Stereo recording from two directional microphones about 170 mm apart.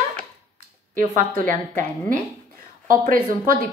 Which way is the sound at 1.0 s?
50° right (ahead or behind).